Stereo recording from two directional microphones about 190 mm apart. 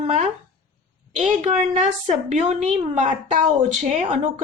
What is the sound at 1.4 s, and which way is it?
A woman's voice, 40° right (ahead or behind).